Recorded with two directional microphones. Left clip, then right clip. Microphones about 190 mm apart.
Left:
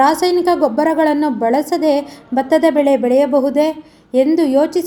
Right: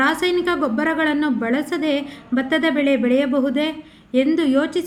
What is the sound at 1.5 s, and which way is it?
A woman's voice, 10° left (ahead or behind).